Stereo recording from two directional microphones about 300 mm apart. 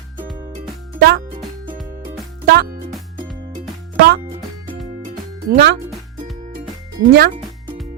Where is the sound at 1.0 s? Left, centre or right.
Right.